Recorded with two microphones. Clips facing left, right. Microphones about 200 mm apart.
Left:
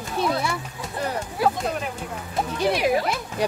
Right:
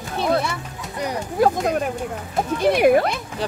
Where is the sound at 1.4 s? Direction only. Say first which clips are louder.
Right 5 dB; 45° right (ahead or behind).